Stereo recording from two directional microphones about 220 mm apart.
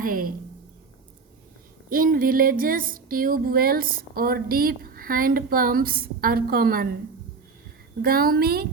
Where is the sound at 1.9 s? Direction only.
40° right (ahead or behind).